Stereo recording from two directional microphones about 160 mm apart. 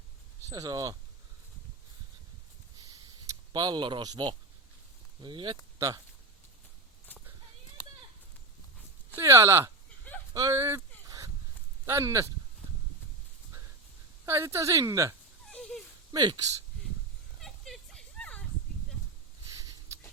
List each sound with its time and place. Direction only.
0.4 s a woman's voice: 20° right (ahead or behind)
2.8 s a sound: 25° right (ahead or behind)
5.2 s a woman's voice: 30° right (ahead or behind)
9.1 s a woman's voice: 20° right (ahead or behind)
10.3 s dog: 20° right (ahead or behind)
11.9 s a woman's voice: 20° right (ahead or behind)
14.3 s a woman's voice: 15° right (ahead or behind)
15.4 s a sound: 5° left (ahead or behind)
16.1 s a woman's voice: 25° right (ahead or behind)
17.4 s a sound: 5° left (ahead or behind)